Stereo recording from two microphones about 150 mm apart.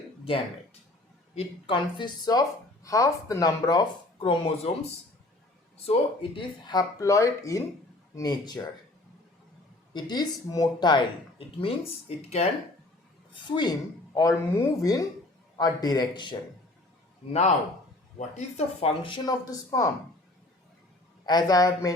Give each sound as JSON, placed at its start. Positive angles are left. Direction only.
{"t": 1.4, "sound": "speech", "side_deg": 35}
{"t": 5.8, "sound": "speech", "side_deg": 45}
{"t": 6.7, "sound": "speech", "side_deg": 25}
{"t": 9.9, "sound": "speech", "side_deg": 30}
{"t": 13.6, "sound": "speech", "side_deg": 25}
{"t": 18.2, "sound": "speech", "side_deg": 50}
{"t": 21.2, "sound": "speech", "side_deg": 25}